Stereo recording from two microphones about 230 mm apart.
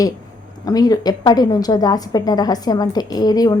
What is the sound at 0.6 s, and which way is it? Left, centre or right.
A woman's voice, centre.